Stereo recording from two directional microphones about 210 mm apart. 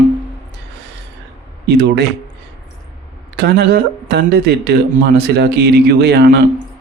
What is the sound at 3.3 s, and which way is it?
Speech, 50° right (ahead or behind).